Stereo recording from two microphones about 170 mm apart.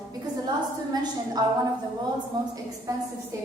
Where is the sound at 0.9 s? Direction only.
20° right (ahead or behind).